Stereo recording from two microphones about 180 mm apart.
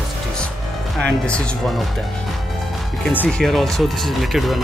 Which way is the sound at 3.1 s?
5° left (ahead or behind).